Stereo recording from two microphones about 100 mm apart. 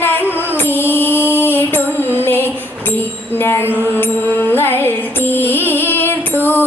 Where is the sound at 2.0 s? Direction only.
20° left (ahead or behind).